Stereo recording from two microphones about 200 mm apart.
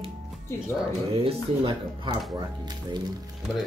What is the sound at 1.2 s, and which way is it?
Speech, 25° right (ahead or behind).